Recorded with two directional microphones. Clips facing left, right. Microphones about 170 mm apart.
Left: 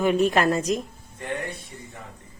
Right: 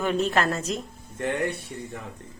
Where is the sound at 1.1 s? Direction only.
75° right (ahead or behind).